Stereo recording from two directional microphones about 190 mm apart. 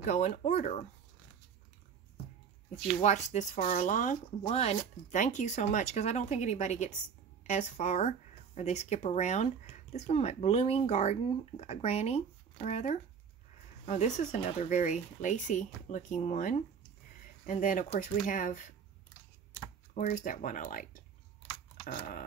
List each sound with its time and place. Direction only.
0.0 s speech: 40° left (ahead or behind)
3.0 s speech: 40° left (ahead or behind)
19.9 s speech: 40° left (ahead or behind)